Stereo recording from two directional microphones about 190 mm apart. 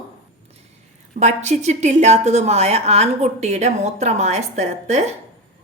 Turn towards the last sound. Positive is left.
turn(degrees=-35)  # may be behind; listen again after turning